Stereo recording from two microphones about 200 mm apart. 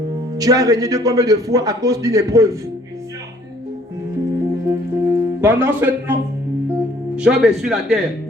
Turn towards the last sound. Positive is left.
turn(degrees=0)  # may be behind; listen again after turning